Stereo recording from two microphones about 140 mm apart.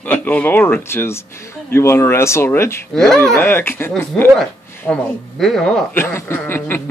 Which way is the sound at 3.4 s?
15° left (ahead or behind).